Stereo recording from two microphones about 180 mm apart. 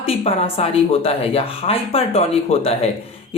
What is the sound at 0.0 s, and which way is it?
Speech, 35° left (ahead or behind).